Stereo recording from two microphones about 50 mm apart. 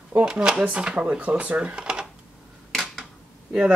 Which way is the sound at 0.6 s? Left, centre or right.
Right.